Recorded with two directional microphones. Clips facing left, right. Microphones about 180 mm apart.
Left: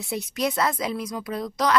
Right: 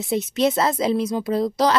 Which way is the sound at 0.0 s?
20° right (ahead or behind).